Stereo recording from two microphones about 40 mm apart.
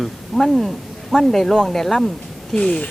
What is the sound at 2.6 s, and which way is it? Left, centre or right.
Speech, centre.